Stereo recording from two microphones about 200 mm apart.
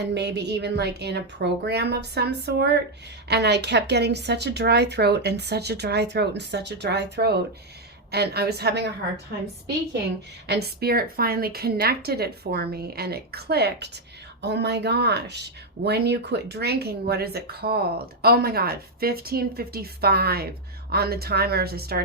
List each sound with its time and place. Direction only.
0.1 s a woman's voice: 55° right (ahead or behind)
10.4 s speech: 55° right (ahead or behind)